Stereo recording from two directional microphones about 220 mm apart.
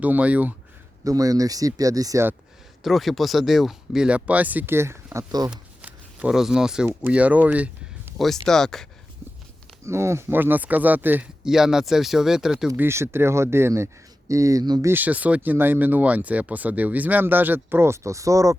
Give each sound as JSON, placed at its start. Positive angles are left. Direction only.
{"t": 0.0, "sound": "speech", "side_deg": -5}
{"t": 2.8, "sound": "speech", "side_deg": 0}
{"t": 5.5, "sound": "speech", "side_deg": -5}
{"t": 9.8, "sound": "speech", "side_deg": -10}